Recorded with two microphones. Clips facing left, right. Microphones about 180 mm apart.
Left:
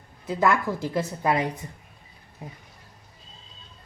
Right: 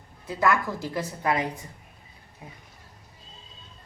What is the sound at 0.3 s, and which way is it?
A woman's voice, 20° left (ahead or behind).